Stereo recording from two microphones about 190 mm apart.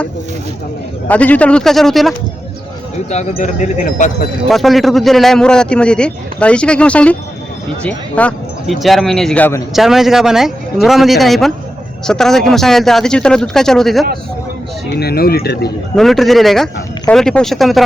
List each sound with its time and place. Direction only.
1.0 s a man's voice: 10° left (ahead or behind)
3.1 s speech: 40° left (ahead or behind)
4.4 s a man's voice: centre (ahead or behind)
14.9 s speech: 55° left (ahead or behind)
16.0 s a man's voice: centre (ahead or behind)